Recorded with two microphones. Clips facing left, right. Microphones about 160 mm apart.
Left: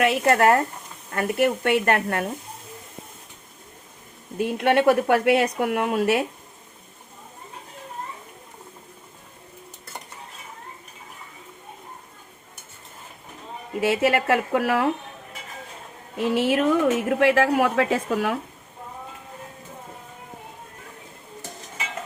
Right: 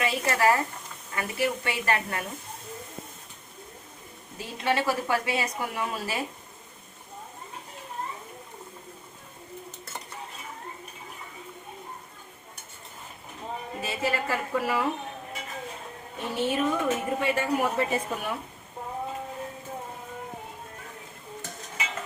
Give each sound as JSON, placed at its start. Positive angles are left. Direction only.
{"t": 0.0, "sound": "a woman's voice", "side_deg": 60}
{"t": 4.4, "sound": "a woman's voice", "side_deg": 60}
{"t": 13.8, "sound": "a woman's voice", "side_deg": 75}
{"t": 16.1, "sound": "a woman's voice", "side_deg": 90}